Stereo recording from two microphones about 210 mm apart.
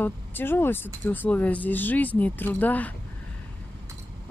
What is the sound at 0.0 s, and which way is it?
Speech, 10° left (ahead or behind).